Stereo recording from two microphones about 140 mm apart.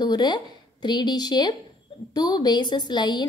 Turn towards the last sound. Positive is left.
turn(degrees=30)  # may be behind; listen again after turning